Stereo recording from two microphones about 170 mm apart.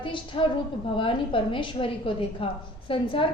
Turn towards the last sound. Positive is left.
turn(degrees=30)  # may be behind; listen again after turning